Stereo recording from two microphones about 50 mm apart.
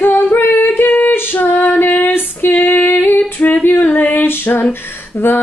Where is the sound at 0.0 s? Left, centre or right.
Left.